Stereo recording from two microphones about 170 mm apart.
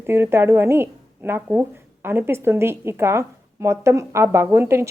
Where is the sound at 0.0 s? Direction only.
15° right (ahead or behind).